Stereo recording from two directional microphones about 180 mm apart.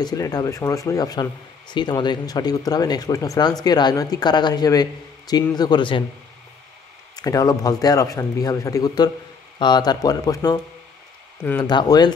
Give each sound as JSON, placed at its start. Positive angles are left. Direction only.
{"t": 0.0, "sound": "speech", "side_deg": 20}
{"t": 7.2, "sound": "speech", "side_deg": 20}
{"t": 11.6, "sound": "speech", "side_deg": 25}